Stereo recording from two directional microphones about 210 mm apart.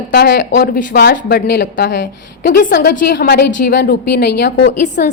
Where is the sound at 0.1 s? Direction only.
50° left (ahead or behind).